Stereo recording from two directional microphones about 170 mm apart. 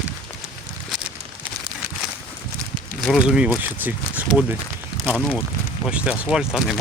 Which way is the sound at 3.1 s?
5° right (ahead or behind).